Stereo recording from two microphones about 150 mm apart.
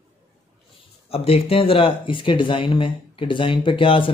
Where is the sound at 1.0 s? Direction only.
40° left (ahead or behind).